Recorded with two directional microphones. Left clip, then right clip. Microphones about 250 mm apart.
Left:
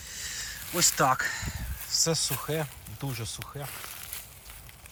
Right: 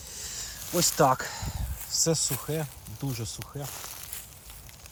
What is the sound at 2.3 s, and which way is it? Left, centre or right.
Speech, centre.